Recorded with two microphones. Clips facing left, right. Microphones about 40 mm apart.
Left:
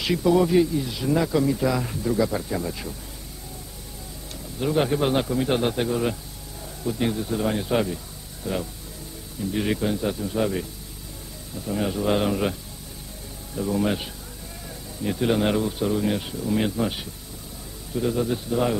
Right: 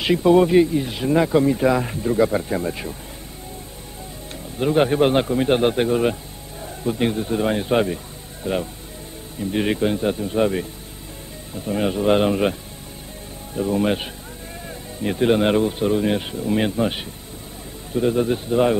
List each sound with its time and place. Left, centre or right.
0.0 s speech: right
4.6 s speech: right
13.6 s speech: right